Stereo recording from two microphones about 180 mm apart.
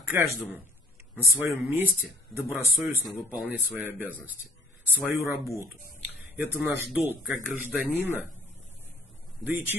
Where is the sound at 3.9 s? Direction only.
10° right (ahead or behind).